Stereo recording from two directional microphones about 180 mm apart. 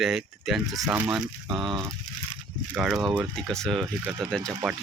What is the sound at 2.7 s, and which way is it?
Speech, 5° right (ahead or behind).